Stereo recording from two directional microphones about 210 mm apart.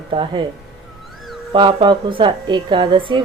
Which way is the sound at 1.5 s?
25° right (ahead or behind).